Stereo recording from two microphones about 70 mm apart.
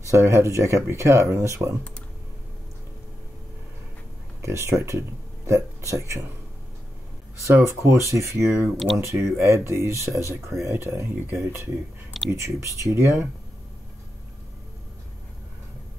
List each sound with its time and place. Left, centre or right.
0.1 s speech: right
4.4 s speech: right
7.3 s speech: right
8.7 s speech: centre
9.0 s speech: right